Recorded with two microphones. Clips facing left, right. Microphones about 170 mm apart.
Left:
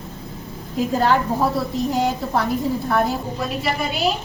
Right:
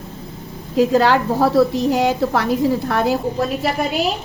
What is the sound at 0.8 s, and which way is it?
A woman's voice, 80° right.